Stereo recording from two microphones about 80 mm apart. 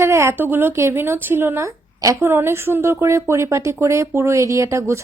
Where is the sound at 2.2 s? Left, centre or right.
Right.